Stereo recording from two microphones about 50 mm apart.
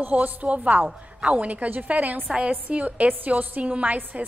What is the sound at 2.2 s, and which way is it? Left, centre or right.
Speech, right.